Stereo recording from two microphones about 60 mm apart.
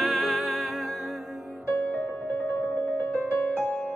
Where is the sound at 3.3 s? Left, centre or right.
Left.